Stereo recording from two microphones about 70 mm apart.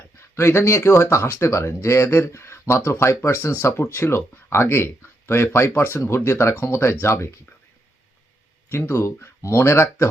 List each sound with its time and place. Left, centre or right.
0.3 s speech: left
8.7 s speech: left